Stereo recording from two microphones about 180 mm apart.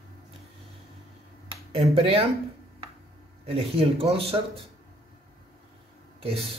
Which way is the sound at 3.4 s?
35° right (ahead or behind).